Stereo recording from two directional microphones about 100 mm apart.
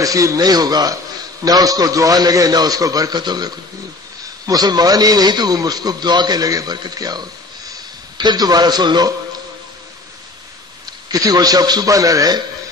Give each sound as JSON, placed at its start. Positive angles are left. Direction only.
{"t": 0.0, "sound": "a man's voice", "side_deg": -35}
{"t": 11.1, "sound": "speech", "side_deg": -40}